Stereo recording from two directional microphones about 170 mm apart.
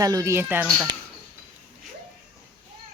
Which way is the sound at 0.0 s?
20° right (ahead or behind).